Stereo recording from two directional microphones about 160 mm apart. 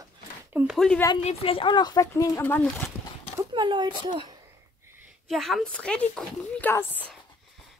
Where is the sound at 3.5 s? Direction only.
30° right (ahead or behind).